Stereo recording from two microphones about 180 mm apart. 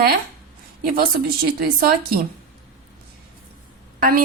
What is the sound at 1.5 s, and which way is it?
Speech, 55° right (ahead or behind).